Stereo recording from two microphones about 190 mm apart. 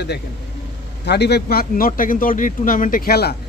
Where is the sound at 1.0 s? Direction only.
60° left (ahead or behind).